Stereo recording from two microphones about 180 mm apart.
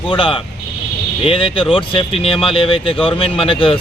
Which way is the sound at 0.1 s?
30° left (ahead or behind).